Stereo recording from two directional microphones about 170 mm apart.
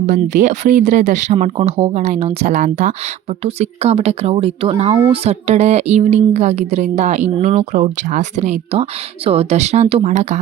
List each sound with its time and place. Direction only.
0.0 s speech: 50° right (ahead or behind)
3.4 s speech: 35° right (ahead or behind)